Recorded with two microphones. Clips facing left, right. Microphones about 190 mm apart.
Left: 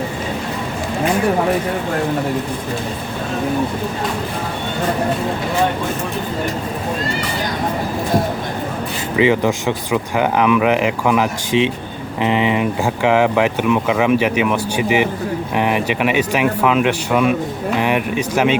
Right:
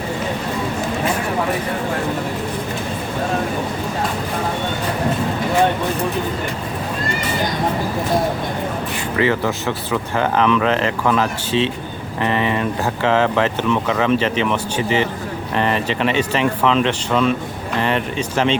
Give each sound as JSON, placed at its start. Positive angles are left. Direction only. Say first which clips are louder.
{"t": 9.1, "sound": "speech", "louder": "left 4 dB", "side_deg": 15}